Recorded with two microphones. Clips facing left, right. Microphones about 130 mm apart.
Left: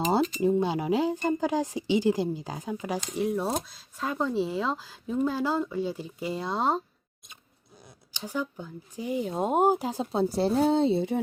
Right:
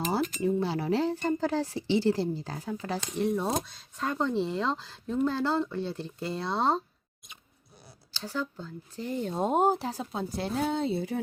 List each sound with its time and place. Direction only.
0.1 s speech: 20° left (ahead or behind)
8.1 s speech: 15° left (ahead or behind)
9.9 s speech: 25° left (ahead or behind)